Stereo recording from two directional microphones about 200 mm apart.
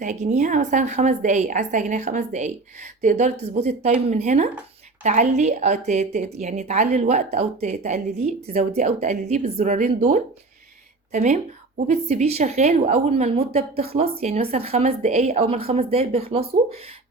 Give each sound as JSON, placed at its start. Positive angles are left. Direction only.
{"t": 0.0, "sound": "a woman's voice", "side_deg": -35}